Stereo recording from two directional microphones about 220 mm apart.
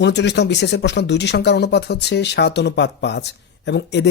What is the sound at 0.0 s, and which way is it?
Speech, 50° left (ahead or behind).